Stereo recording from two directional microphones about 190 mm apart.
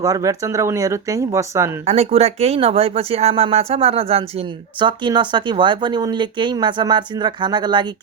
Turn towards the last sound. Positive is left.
turn(degrees=-25)  # may be behind; listen again after turning